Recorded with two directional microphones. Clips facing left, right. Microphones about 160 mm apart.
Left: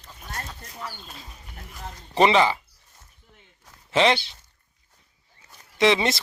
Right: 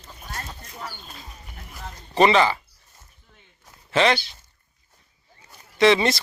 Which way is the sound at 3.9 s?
20° left (ahead or behind).